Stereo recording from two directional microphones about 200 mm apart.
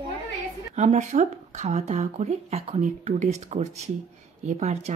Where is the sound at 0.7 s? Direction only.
35° right (ahead or behind).